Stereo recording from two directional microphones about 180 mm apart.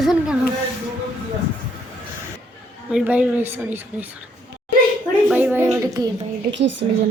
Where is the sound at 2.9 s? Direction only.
5° right (ahead or behind).